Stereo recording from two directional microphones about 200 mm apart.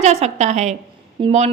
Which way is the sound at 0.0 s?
35° right (ahead or behind).